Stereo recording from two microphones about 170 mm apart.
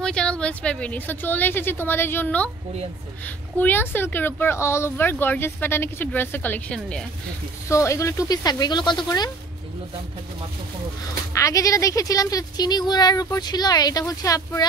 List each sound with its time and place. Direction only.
0.0 s a woman's voice: 5° left (ahead or behind)
7.6 s speech: 15° left (ahead or behind)
11.3 s speech: 20° left (ahead or behind)